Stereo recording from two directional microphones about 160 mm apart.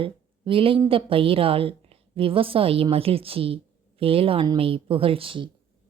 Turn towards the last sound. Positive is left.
turn(degrees=-35)  # may be behind; listen again after turning